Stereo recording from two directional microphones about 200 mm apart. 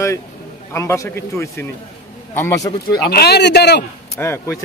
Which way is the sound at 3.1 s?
50° left (ahead or behind).